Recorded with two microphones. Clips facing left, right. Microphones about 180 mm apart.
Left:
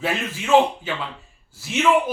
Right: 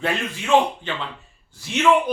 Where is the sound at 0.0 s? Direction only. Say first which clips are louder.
Even; 5° left (ahead or behind).